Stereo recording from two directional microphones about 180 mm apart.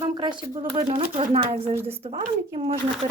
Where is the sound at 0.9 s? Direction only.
30° right (ahead or behind).